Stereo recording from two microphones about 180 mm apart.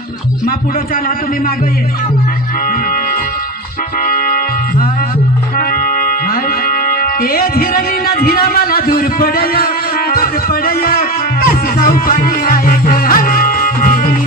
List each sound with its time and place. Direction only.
4.1 s music: 55° left (ahead or behind)